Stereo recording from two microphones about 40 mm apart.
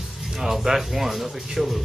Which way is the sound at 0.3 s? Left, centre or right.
Centre.